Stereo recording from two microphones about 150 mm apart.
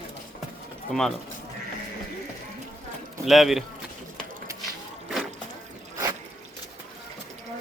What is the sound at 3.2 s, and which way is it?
Speech, centre (ahead or behind).